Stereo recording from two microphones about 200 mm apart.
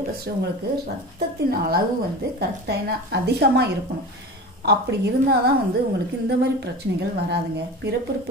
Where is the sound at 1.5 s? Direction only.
50° right (ahead or behind).